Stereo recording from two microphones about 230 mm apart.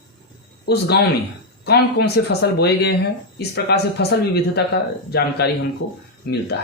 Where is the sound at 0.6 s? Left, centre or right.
Left.